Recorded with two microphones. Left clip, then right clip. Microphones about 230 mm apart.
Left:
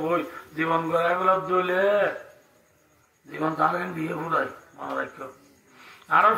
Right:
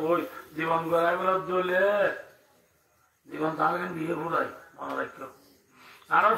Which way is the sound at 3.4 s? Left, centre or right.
Left.